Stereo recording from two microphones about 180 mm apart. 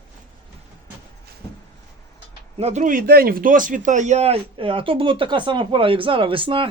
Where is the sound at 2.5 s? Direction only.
40° right (ahead or behind).